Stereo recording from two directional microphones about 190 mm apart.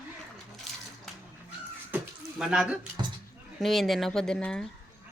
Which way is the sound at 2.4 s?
5° right (ahead or behind).